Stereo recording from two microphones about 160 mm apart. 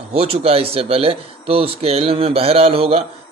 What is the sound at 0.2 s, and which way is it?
Speech, 40° right (ahead or behind).